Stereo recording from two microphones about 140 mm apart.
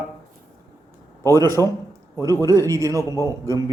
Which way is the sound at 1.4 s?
25° right (ahead or behind).